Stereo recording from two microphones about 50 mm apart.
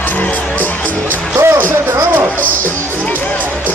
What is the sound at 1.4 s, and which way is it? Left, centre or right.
Music, right.